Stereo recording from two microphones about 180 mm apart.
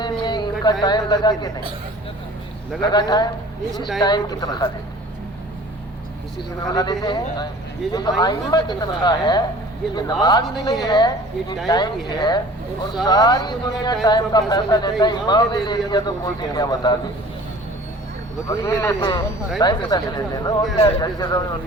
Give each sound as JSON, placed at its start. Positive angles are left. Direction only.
{"t": 0.0, "sound": "a sound", "side_deg": 25}
{"t": 2.8, "sound": "speech", "side_deg": 25}
{"t": 6.6, "sound": "speech", "side_deg": 20}
{"t": 18.4, "sound": "speech", "side_deg": 15}